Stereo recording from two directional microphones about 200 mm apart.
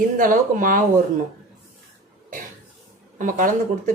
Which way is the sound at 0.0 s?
45° right (ahead or behind).